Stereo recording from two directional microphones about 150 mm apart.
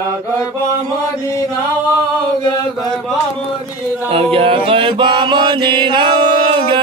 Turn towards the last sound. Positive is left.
turn(degrees=-35)  # may be behind; listen again after turning